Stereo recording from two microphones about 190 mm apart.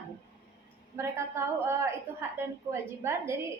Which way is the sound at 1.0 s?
15° right (ahead or behind).